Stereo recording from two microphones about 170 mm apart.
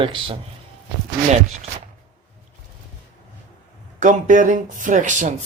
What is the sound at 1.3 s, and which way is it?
Speech, 40° right (ahead or behind).